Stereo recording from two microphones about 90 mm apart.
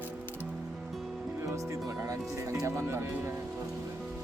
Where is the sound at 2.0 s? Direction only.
35° right (ahead or behind).